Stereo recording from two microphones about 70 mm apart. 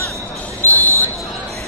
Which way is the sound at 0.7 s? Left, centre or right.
Left.